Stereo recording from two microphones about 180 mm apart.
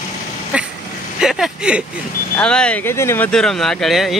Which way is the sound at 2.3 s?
5° left (ahead or behind).